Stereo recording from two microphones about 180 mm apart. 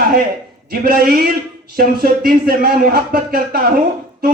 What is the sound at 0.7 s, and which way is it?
A man's voice, 55° right (ahead or behind).